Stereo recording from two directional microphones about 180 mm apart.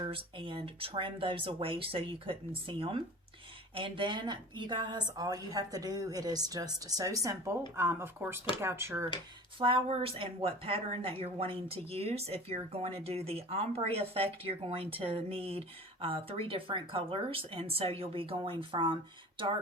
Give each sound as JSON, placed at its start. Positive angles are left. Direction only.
{"t": 0.0, "sound": "a woman's voice", "side_deg": -30}
{"t": 9.6, "sound": "speech", "side_deg": -30}